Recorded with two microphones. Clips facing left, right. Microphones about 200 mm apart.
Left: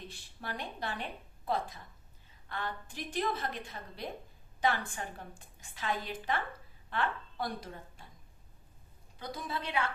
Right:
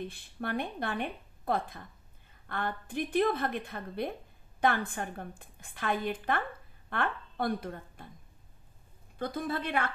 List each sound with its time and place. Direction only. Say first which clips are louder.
0.0 s a woman's voice: right 8 dB; 55° right (ahead or behind)
9.2 s a woman's voice: right 6 dB; 55° right (ahead or behind)